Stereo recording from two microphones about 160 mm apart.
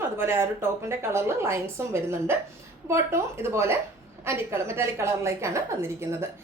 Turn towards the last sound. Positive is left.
turn(degrees=-15)  # may be behind; listen again after turning